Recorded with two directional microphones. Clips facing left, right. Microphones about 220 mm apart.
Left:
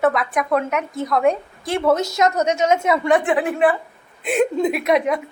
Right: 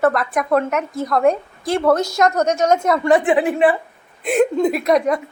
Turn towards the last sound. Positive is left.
turn(degrees=0)  # may be behind; listen again after turning